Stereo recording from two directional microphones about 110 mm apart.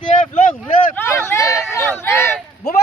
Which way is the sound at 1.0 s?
25° left (ahead or behind).